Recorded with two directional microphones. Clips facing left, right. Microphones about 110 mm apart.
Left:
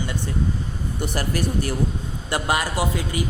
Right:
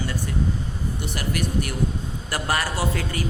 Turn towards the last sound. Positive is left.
turn(degrees=20)  # may be behind; listen again after turning